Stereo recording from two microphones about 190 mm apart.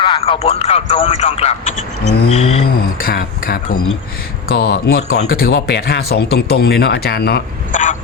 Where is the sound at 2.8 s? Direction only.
50° left (ahead or behind).